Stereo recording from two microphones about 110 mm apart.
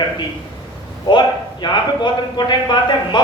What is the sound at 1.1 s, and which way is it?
A man's voice, 45° left (ahead or behind).